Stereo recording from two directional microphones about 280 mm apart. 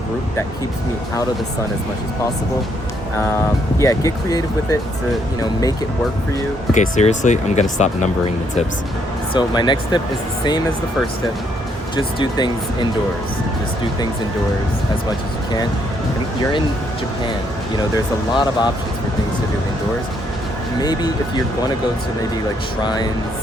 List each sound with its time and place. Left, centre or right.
3.8 s speech: centre
6.7 s speech: left
11.9 s speech: centre
17.9 s speech: centre
20.8 s speech: centre
22.8 s speech: centre